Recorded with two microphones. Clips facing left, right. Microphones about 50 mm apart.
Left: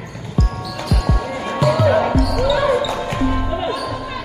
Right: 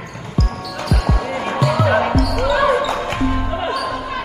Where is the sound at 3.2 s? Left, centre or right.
Centre.